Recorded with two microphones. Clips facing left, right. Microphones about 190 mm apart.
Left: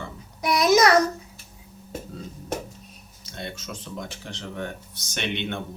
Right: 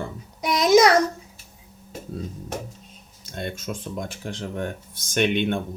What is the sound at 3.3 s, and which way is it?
Speech, 50° right (ahead or behind).